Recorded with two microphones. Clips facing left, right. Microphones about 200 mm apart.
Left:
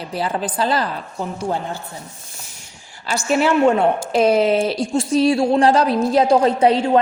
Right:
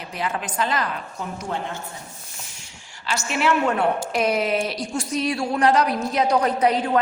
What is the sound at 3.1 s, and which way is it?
Speech, 40° left (ahead or behind).